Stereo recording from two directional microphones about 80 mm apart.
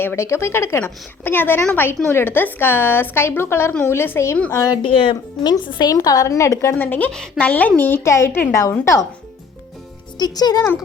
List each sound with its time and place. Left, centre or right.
0.0 s a woman's voice: left
4.7 s speech: left
5.9 s a woman's voice: left
6.7 s a woman's voice: left
7.1 s a woman's voice: centre
7.8 s a woman's voice: left
10.2 s speech: left